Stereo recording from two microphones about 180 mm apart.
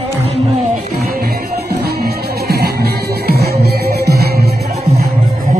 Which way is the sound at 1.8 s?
60° right (ahead or behind).